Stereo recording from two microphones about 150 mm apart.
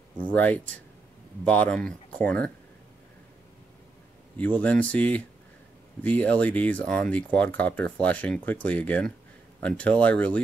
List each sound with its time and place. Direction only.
0.3 s speech: 10° left (ahead or behind)
4.4 s speech: 10° left (ahead or behind)